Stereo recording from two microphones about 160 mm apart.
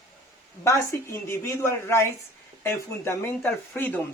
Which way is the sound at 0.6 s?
15° left (ahead or behind).